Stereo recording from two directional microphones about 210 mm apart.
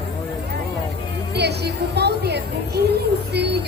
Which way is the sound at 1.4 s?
50° right (ahead or behind).